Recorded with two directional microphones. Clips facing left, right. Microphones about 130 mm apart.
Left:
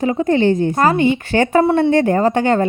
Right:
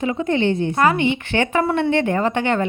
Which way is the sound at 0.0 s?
40° left (ahead or behind).